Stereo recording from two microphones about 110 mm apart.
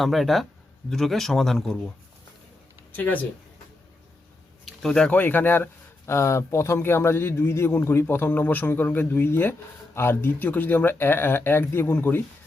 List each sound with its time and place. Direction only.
0.0 s speech: centre (ahead or behind)
2.9 s speech: 15° left (ahead or behind)
4.6 s a man's voice: 5° left (ahead or behind)